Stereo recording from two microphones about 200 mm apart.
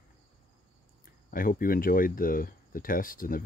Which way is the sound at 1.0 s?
45° left (ahead or behind).